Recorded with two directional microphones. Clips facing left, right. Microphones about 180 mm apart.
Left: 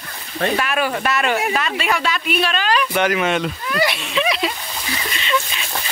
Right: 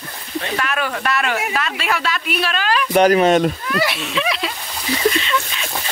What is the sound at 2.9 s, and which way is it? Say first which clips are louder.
Speech: right 11 dB; 40° right (ahead or behind).